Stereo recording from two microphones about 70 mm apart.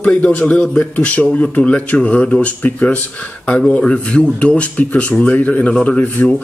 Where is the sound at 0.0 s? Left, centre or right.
Centre.